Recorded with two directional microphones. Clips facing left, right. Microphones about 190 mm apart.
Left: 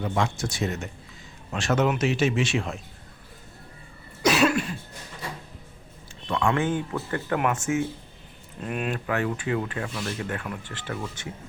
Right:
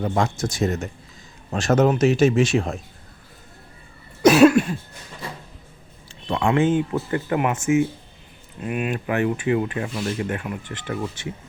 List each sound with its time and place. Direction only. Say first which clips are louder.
0.0 s speech: right 4 dB; 40° right (ahead or behind)
4.2 s cough: right 9 dB; 50° right (ahead or behind)
6.2 s speech: right 5 dB; 25° right (ahead or behind)
8.6 s speech: right 4 dB; 5° right (ahead or behind)
9.0 s speech: right 7 dB; 20° right (ahead or behind)